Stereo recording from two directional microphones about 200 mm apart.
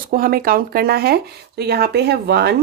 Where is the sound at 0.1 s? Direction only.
45° right (ahead or behind).